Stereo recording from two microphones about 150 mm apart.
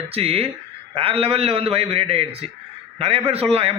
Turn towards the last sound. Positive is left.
turn(degrees=-40)  # may be behind; listen again after turning